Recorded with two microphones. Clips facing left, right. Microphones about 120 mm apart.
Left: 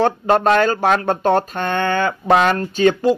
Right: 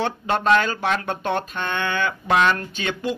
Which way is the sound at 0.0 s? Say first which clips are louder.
Left 7 dB; 40° left (ahead or behind).